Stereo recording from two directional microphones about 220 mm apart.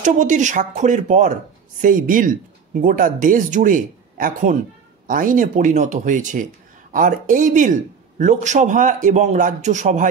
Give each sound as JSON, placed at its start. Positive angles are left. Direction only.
{"t": 0.0, "sound": "speech", "side_deg": -35}